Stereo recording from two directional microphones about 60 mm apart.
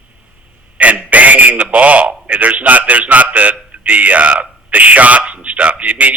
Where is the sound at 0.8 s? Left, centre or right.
Right.